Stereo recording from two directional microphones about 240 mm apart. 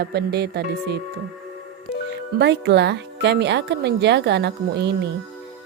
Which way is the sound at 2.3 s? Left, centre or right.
Right.